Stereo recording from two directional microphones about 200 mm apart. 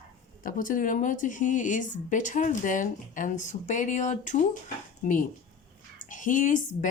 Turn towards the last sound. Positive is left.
turn(degrees=40)  # may be behind; listen again after turning